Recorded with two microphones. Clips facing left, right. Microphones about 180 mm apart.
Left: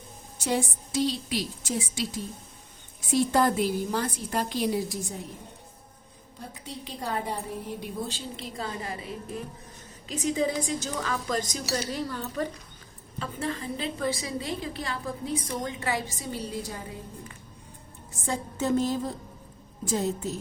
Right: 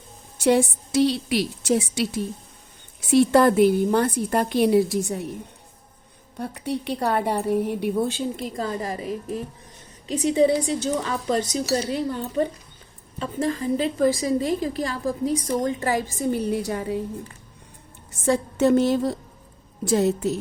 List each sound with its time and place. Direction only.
0.4 s a woman's voice: 70° right (ahead or behind)
6.3 s a woman's voice: 70° right (ahead or behind); by 9.0 s 40° right (ahead or behind)
10.1 s a woman's voice: 35° right (ahead or behind)
13.1 s a woman's voice: 35° right (ahead or behind); by 17.0 s 70° right (ahead or behind)
18.3 s a woman's voice: 75° right (ahead or behind)